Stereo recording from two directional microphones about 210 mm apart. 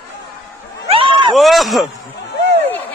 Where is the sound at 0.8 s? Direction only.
25° right (ahead or behind).